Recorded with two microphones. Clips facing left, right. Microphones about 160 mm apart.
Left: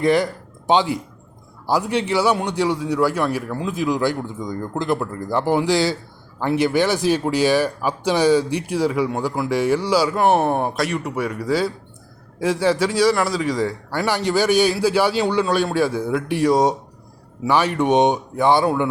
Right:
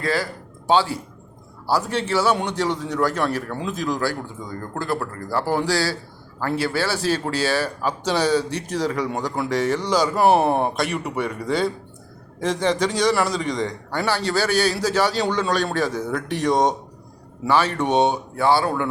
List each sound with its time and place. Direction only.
0.0 s a man's voice: 20° left (ahead or behind)
10.2 s a man's voice: 5° right (ahead or behind); by 18.9 s 15° left (ahead or behind)